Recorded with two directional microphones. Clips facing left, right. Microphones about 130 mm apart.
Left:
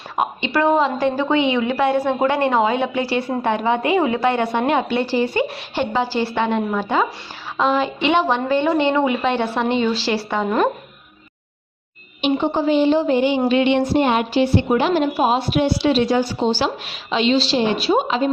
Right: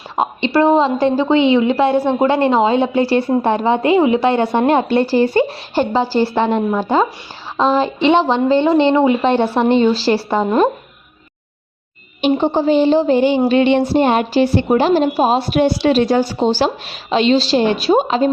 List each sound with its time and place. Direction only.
0.2 s a woman's voice: 30° right (ahead or behind)
12.2 s a woman's voice: 30° right (ahead or behind)